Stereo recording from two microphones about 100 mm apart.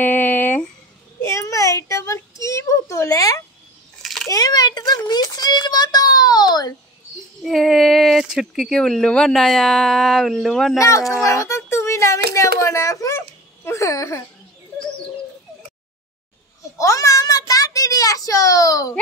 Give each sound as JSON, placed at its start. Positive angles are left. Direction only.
{"t": 0.0, "sound": "a sound", "side_deg": 20}
{"t": 4.0, "sound": "a sound", "side_deg": 0}
{"t": 4.3, "sound": "child singing", "side_deg": 40}
{"t": 7.4, "sound": "speech", "side_deg": 0}
{"t": 10.8, "sound": "speech", "side_deg": 30}
{"t": 16.7, "sound": "child singing", "side_deg": 35}